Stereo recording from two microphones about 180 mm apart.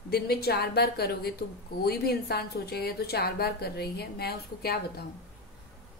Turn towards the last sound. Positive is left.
turn(degrees=60)  # may be behind; listen again after turning